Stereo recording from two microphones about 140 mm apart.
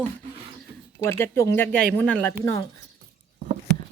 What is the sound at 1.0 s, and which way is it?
Speech, 20° left (ahead or behind).